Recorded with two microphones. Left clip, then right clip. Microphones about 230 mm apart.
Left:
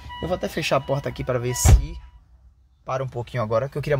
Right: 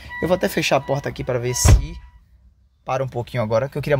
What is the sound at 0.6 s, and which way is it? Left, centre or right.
Speech, centre.